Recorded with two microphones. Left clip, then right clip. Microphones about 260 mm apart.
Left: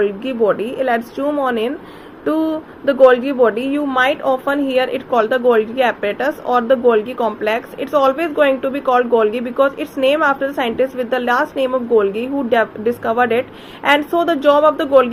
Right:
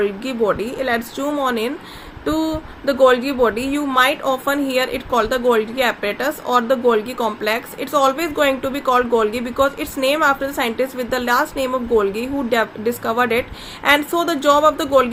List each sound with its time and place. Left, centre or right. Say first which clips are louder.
0.0 s speech: left 3 dB; centre